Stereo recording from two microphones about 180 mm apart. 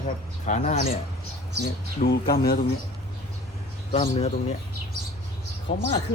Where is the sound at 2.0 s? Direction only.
55° left (ahead or behind).